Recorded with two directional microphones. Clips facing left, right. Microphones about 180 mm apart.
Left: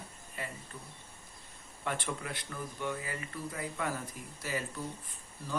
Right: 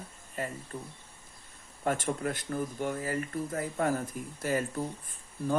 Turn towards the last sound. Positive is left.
turn(degrees=-50)  # may be behind; listen again after turning